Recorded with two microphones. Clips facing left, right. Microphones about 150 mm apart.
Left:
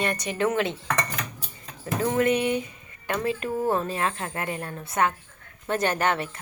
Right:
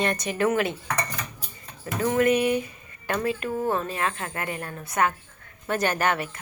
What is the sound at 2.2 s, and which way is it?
Speech, 25° left (ahead or behind).